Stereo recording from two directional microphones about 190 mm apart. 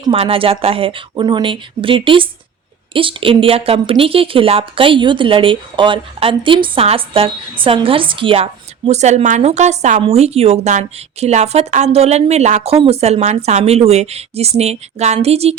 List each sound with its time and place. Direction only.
0.0 s speech: 30° right (ahead or behind)